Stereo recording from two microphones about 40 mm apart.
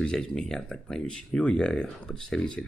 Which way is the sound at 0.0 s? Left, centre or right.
Centre.